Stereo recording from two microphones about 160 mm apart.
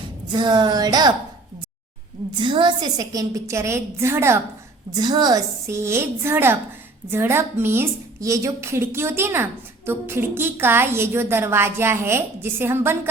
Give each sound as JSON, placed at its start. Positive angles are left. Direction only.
{"t": 0.3, "sound": "a woman's voice", "side_deg": -25}
{"t": 2.4, "sound": "a woman's voice", "side_deg": -30}
{"t": 4.9, "sound": "a woman's voice", "side_deg": -25}